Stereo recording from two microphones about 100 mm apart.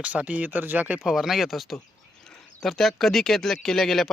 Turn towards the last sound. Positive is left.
turn(degrees=5)  # may be behind; listen again after turning